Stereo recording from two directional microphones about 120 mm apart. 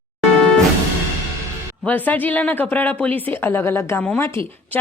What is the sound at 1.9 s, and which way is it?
A woman's voice, 15° left (ahead or behind).